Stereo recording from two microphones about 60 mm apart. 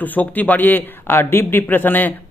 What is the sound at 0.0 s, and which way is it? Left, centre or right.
A man's voice, left.